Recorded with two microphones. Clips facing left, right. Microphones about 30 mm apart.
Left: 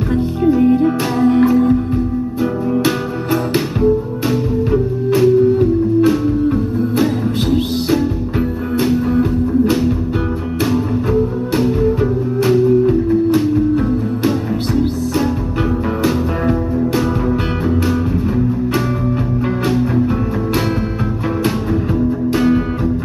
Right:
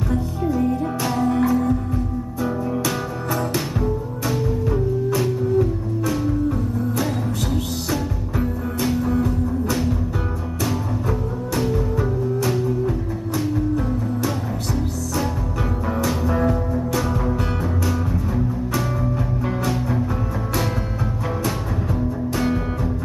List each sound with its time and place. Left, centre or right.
0.1 s music: left
4.7 s music: left
5.9 s music: left
11.8 s music: left
16.0 s music: left